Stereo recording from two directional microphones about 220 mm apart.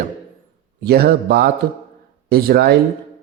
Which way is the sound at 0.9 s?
45° right (ahead or behind).